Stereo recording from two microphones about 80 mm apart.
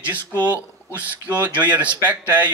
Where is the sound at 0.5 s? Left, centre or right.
Centre.